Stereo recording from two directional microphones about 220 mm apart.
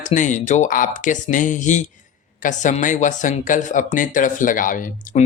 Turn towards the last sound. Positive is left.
turn(degrees=35)  # may be behind; listen again after turning